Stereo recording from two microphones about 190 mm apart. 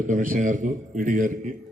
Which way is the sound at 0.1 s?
45° right (ahead or behind).